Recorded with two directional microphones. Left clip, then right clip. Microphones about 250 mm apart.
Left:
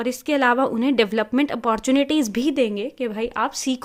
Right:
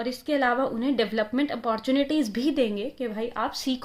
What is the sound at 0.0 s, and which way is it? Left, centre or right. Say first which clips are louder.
Speech: left 5 dB; left.